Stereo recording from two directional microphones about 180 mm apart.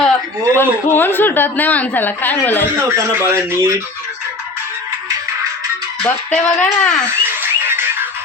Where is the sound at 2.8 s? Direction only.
15° right (ahead or behind).